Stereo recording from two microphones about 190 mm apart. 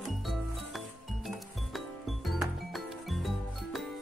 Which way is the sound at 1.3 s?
Centre (ahead or behind).